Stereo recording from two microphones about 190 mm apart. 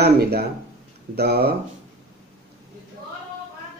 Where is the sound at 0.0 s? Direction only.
55° right (ahead or behind).